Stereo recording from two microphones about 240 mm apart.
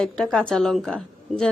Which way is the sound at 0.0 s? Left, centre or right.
Centre.